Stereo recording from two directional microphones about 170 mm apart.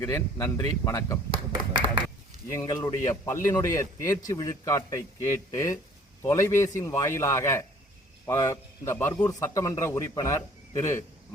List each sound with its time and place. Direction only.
0.0 s a man's voice: 15° left (ahead or behind)
2.5 s a man's voice: 15° left (ahead or behind)